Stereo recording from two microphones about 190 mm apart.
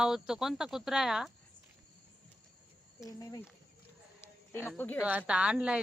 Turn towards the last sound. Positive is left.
turn(degrees=-5)  # may be behind; listen again after turning